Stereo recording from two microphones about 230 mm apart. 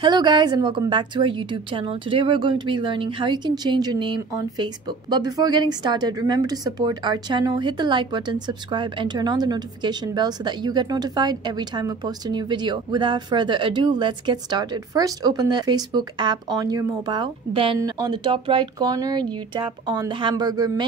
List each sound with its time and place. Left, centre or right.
0.0 s a woman's voice: centre